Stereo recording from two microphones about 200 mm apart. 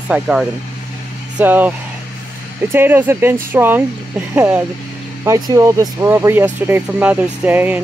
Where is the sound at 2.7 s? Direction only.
10° right (ahead or behind).